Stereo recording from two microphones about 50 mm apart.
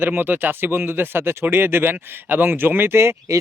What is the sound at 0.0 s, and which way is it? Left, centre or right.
Speech, right.